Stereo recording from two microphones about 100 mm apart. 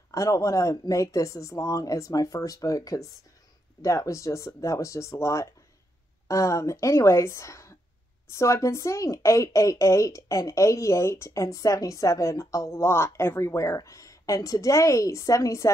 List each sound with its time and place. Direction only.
0.1 s a woman's voice: 30° left (ahead or behind)